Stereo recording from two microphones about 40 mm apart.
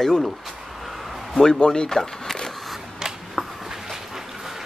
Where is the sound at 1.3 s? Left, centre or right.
Centre.